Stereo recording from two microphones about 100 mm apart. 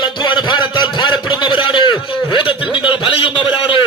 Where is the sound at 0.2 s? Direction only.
50° left (ahead or behind).